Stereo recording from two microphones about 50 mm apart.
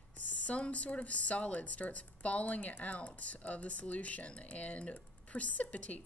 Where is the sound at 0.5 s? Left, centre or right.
Left.